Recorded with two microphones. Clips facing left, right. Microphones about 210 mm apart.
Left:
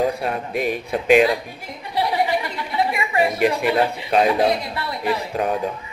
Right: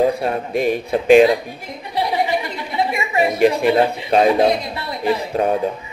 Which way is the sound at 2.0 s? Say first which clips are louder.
Right 1 dB; 20° right (ahead or behind).